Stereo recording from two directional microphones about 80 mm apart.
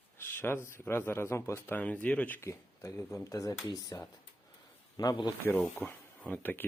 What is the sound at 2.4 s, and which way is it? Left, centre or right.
Speech, left.